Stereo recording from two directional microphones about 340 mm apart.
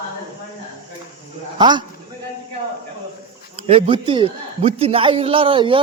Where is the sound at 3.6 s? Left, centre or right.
Centre.